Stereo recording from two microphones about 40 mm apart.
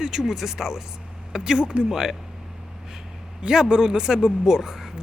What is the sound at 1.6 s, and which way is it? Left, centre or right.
Speech, right.